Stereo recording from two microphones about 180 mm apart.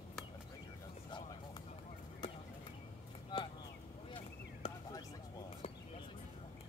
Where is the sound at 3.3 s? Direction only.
25° left (ahead or behind).